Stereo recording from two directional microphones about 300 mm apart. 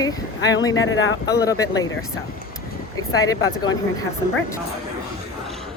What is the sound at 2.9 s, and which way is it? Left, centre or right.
Speech, centre.